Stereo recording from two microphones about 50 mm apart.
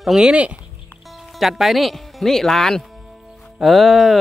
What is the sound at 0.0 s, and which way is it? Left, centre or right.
Speech, centre.